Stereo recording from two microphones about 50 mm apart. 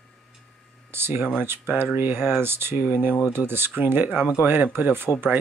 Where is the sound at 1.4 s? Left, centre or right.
Right.